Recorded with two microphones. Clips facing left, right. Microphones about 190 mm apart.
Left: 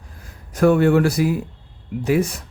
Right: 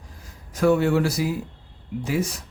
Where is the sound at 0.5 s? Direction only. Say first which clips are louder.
Left 4 dB; 55° left (ahead or behind).